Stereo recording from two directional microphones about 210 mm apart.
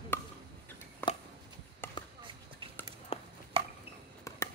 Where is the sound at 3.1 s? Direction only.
25° left (ahead or behind).